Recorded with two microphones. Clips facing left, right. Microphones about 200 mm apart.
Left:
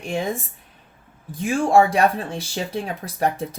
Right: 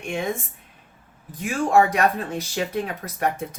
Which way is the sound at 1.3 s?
30° left (ahead or behind).